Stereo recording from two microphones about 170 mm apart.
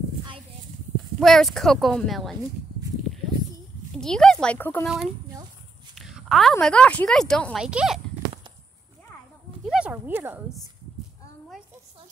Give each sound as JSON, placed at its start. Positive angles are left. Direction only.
{"t": 1.2, "sound": "speech", "side_deg": 0}
{"t": 4.0, "sound": "speech", "side_deg": 5}
{"t": 4.8, "sound": "speech", "side_deg": 0}
{"t": 5.9, "sound": "a sound", "side_deg": 0}
{"t": 6.6, "sound": "speech", "side_deg": 5}
{"t": 9.7, "sound": "speech", "side_deg": -5}